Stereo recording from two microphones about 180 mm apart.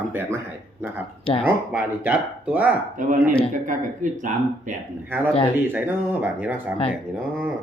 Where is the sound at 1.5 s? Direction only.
10° right (ahead or behind).